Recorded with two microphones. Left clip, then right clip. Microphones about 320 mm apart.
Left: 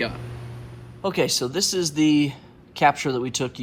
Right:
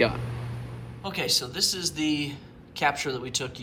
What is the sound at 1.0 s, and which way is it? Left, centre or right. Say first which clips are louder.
A man's voice: left 5 dB; centre.